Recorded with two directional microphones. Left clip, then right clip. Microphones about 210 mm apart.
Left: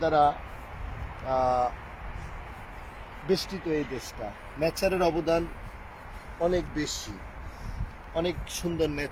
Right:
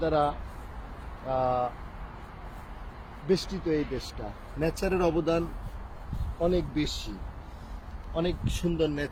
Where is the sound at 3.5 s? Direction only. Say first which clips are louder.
Right 1 dB; 45° left (ahead or behind).